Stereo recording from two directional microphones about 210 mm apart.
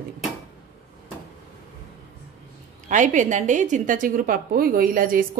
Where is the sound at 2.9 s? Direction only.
35° right (ahead or behind).